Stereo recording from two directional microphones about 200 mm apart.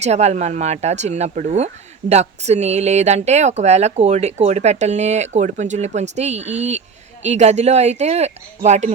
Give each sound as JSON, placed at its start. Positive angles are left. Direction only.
{"t": 0.0, "sound": "speech", "side_deg": -35}